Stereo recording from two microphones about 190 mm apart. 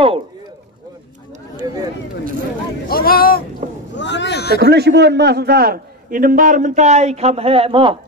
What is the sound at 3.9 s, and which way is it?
Speech, 70° left (ahead or behind).